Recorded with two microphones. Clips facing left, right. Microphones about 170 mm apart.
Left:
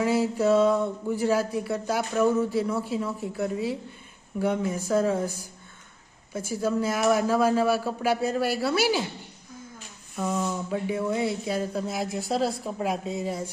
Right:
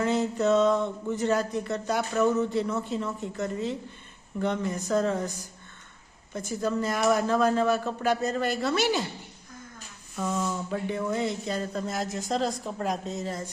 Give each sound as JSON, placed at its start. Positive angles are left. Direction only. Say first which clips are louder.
{"t": 0.0, "sound": "speech", "louder": "left 2 dB", "side_deg": 10}
{"t": 10.2, "sound": "speech", "louder": "left 1 dB", "side_deg": 10}